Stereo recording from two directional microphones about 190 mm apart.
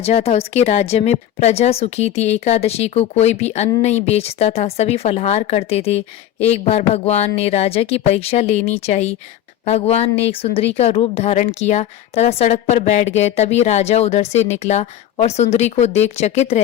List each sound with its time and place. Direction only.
0.0 s speech: 35° left (ahead or behind)